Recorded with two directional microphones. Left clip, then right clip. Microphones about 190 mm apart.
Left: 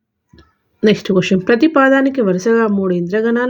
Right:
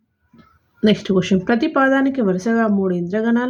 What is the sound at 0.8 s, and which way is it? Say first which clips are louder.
Speech: left 4 dB; 20° left (ahead or behind).